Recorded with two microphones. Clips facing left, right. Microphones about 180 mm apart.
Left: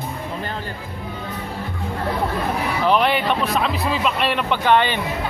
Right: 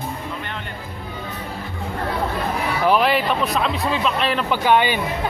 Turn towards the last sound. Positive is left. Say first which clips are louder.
# even
turn(degrees=-10)  # may be behind; listen again after turning